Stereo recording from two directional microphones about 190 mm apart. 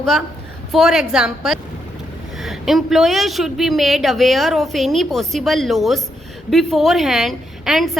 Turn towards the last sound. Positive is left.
turn(degrees=0)  # may be behind; listen again after turning